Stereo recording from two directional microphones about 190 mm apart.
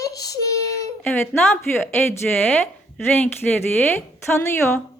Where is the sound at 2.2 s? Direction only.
5° left (ahead or behind).